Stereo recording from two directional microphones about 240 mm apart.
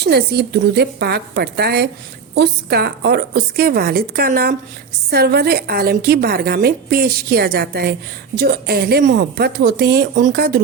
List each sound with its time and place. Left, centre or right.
0.0 s a woman's voice: right